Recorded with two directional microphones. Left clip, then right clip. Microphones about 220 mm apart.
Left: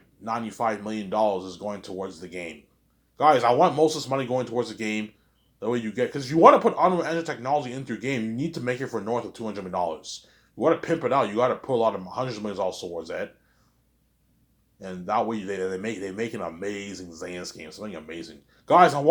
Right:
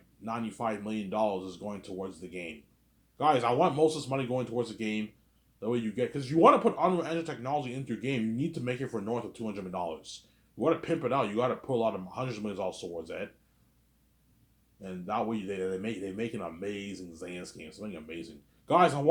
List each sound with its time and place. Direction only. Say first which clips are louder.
0.3 s a man's voice: left 7 dB; 15° left (ahead or behind)
14.8 s a man's voice: left 7 dB; 15° left (ahead or behind)